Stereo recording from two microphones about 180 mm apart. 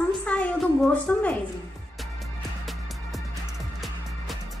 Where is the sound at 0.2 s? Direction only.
5° left (ahead or behind).